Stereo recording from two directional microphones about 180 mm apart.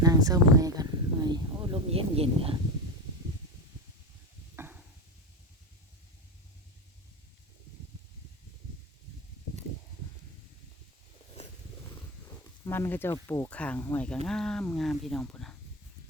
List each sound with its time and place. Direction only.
0.0 s speech: 20° right (ahead or behind)
4.5 s a sound: 10° right (ahead or behind)
12.6 s speech: 15° left (ahead or behind)